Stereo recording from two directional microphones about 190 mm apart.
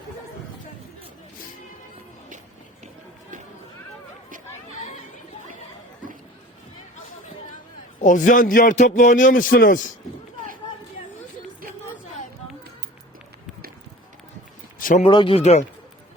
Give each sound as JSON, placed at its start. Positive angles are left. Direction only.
{"t": 8.0, "sound": "a man's voice", "side_deg": 45}
{"t": 14.8, "sound": "a sound", "side_deg": 45}
{"t": 15.0, "sound": "speech", "side_deg": 25}